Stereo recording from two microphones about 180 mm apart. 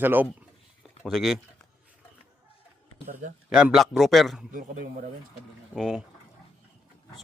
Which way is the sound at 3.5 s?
Centre (ahead or behind).